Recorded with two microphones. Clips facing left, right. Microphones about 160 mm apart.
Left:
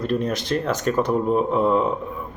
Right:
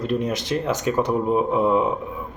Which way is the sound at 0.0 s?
15° right (ahead or behind).